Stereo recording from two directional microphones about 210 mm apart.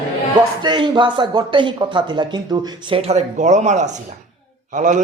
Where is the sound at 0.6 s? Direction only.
20° right (ahead or behind).